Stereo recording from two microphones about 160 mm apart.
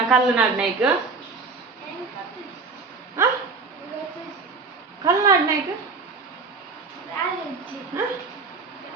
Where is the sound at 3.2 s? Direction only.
15° right (ahead or behind).